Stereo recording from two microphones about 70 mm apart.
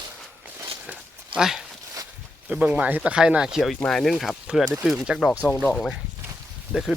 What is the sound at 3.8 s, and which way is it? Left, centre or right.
Speech, centre.